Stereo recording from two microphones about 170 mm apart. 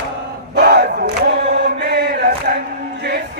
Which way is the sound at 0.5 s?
75° right (ahead or behind).